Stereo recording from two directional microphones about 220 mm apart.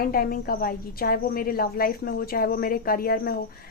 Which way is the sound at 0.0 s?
45° left (ahead or behind).